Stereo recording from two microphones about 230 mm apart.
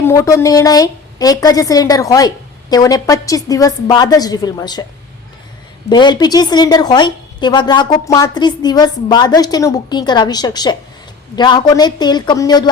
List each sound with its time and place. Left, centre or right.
0.0 s a woman's voice: centre
5.9 s a woman's voice: centre